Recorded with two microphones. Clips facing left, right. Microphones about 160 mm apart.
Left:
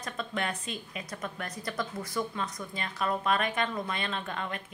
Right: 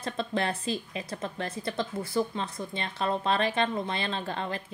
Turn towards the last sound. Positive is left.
turn(degrees=-30)  # may be behind; listen again after turning